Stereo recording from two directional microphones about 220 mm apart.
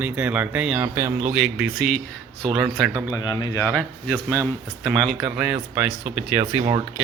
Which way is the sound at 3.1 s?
15° left (ahead or behind).